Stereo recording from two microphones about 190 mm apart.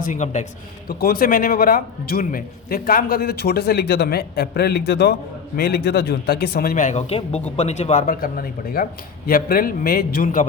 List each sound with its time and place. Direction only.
0.0 s speech: 40° left (ahead or behind)
0.9 s a man's voice: 50° left (ahead or behind)